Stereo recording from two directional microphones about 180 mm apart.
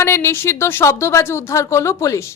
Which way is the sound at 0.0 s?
15° left (ahead or behind).